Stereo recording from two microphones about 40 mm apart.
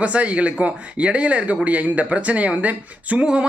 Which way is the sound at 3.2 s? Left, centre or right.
Right.